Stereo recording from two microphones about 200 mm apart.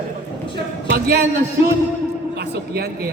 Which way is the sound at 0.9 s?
50° right (ahead or behind).